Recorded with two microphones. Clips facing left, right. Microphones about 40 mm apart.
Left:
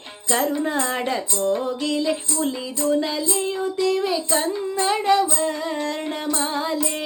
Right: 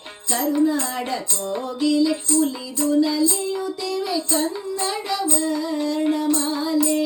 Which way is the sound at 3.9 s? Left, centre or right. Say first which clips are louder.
Even; left.